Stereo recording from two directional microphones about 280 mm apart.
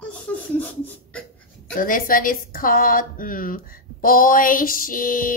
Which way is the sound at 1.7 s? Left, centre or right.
Left.